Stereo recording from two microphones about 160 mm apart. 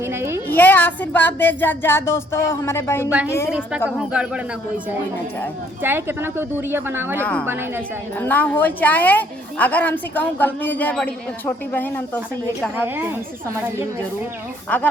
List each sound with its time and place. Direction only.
0.0 s a sound: 15° right (ahead or behind)
0.4 s a woman's voice: 10° left (ahead or behind)
3.5 s speech: 5° right (ahead or behind)
5.8 s speech: 15° right (ahead or behind)
7.2 s a woman's voice: 10° left (ahead or behind)
7.4 s speech: 15° right (ahead or behind)
8.2 s a woman's voice: 10° left (ahead or behind)
12.7 s speech: 15° right (ahead or behind)
14.7 s a woman's voice: 10° left (ahead or behind)